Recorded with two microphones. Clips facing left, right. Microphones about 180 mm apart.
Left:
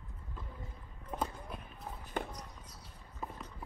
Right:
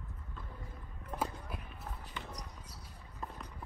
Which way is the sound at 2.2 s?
50° left (ahead or behind).